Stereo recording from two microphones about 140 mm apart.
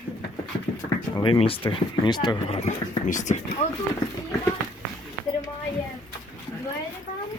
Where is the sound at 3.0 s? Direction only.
60° left (ahead or behind).